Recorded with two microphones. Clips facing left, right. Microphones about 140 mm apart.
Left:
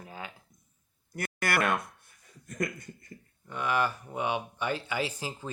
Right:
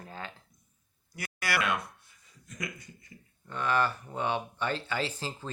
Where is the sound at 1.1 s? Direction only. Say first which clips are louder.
Left 3 dB; 50° left (ahead or behind).